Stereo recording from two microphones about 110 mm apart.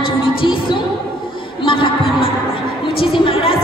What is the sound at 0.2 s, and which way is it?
Music, 50° left (ahead or behind).